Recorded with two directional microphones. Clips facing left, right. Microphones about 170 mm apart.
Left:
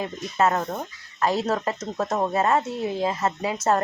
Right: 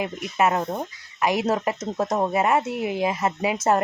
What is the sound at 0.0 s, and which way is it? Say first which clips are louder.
Speech: even; 15° right (ahead or behind).